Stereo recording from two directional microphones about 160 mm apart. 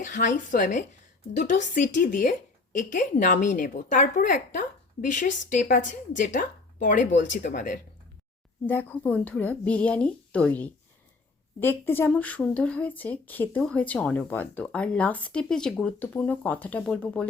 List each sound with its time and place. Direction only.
0.0 s a woman's voice: 55° left (ahead or behind)
8.6 s speech: 10° left (ahead or behind)